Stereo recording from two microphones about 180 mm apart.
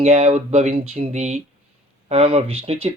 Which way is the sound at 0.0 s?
35° right (ahead or behind).